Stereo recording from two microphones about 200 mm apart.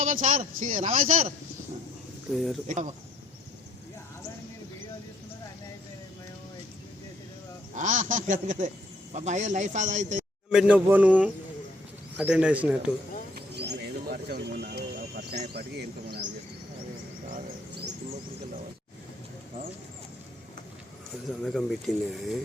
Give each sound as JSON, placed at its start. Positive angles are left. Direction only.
{"t": 0.0, "sound": "speech", "side_deg": -40}
{"t": 2.6, "sound": "speech", "side_deg": -40}
{"t": 7.8, "sound": "speech", "side_deg": -40}
{"t": 10.5, "sound": "speech", "side_deg": -5}
{"t": 13.3, "sound": "bird", "side_deg": -50}
{"t": 15.5, "sound": "speech", "side_deg": -55}
{"t": 21.2, "sound": "speech", "side_deg": 0}